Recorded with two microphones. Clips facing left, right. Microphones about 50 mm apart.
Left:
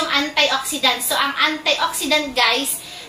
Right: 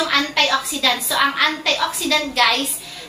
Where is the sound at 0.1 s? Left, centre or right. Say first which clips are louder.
Even; centre.